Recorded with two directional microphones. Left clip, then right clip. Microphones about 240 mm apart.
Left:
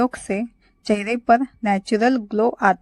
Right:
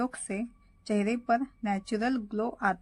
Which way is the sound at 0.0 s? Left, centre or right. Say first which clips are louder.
Left 12 dB; left.